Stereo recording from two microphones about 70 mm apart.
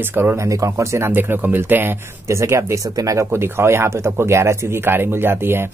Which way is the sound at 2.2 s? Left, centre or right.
Right.